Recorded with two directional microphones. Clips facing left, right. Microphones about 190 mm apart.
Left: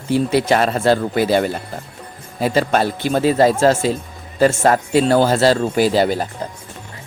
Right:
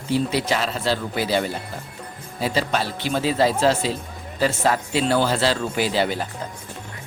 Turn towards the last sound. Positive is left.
turn(degrees=40)  # may be behind; listen again after turning